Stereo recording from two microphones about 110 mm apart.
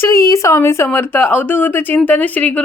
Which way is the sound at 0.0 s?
30° left (ahead or behind).